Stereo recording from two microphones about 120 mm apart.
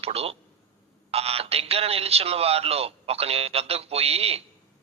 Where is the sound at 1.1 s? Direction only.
55° right (ahead or behind).